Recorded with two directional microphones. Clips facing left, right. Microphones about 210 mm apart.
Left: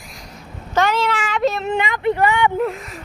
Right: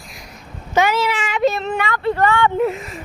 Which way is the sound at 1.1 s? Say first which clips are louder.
Left 1 dB; 15° right (ahead or behind).